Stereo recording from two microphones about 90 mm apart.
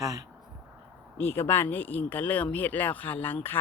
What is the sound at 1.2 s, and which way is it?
Speech, 25° left (ahead or behind).